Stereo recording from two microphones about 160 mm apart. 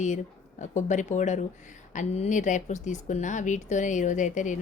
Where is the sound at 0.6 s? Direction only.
50° left (ahead or behind).